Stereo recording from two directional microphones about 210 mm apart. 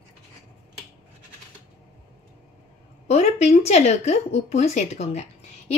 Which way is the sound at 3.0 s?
30° left (ahead or behind).